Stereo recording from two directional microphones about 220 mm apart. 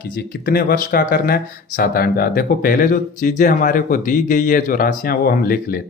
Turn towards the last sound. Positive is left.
turn(degrees=40)  # may be behind; listen again after turning